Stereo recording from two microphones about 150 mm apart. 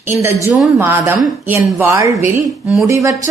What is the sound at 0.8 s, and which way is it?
A woman's voice, 15° right (ahead or behind).